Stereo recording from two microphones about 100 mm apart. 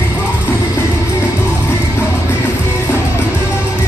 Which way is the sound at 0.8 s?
30° left (ahead or behind).